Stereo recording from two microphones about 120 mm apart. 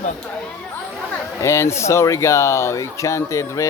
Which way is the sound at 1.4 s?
25° left (ahead or behind).